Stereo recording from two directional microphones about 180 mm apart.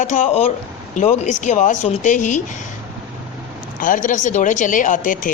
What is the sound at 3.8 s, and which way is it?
Speech, 50° left (ahead or behind).